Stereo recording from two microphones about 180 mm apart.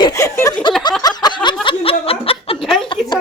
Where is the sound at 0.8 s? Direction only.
25° left (ahead or behind).